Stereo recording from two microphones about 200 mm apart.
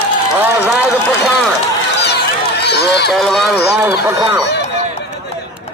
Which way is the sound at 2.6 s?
55° left (ahead or behind).